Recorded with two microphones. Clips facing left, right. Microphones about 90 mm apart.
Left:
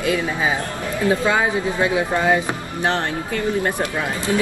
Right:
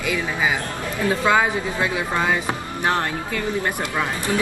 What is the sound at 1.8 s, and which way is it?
Speech, 20° left (ahead or behind).